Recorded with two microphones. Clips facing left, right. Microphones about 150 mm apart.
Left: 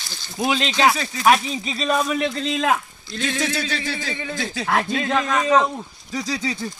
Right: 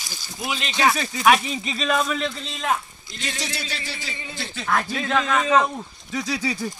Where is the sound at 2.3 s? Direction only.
90° left.